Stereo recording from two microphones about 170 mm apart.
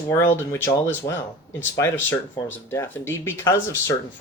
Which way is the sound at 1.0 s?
40° left (ahead or behind).